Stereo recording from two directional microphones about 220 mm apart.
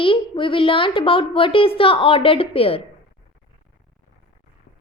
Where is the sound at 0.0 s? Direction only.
25° left (ahead or behind).